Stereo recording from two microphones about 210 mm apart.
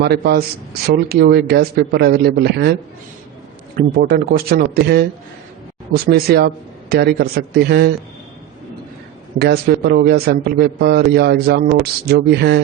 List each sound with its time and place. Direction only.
0.0 s a man's voice: 50° right (ahead or behind)
3.8 s a man's voice: 45° right (ahead or behind)
6.1 s a man's voice: 50° right (ahead or behind)
9.4 s a man's voice: 50° right (ahead or behind)